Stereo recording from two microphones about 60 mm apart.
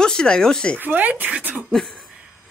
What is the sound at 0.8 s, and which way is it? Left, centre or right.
Speech, right.